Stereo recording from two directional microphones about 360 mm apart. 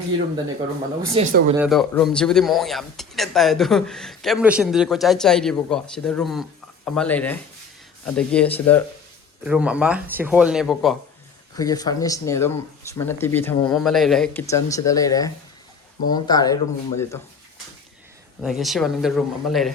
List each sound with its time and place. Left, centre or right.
1.1 s speech: centre
1.5 s speech: centre
11.5 s speech: centre
18.4 s speech: centre